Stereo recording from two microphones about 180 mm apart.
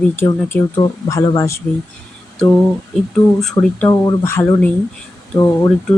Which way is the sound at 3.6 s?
15° left (ahead or behind).